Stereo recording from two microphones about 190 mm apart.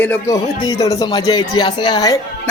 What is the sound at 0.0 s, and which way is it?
A woman's voice, 10° left (ahead or behind).